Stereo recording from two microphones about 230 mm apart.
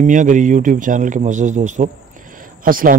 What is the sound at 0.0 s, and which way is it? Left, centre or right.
A man's voice, right.